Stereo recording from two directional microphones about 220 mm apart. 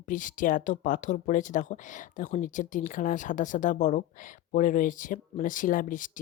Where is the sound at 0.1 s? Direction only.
35° left (ahead or behind).